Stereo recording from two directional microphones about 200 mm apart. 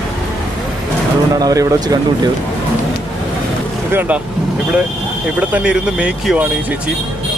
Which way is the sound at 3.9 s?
10° right (ahead or behind).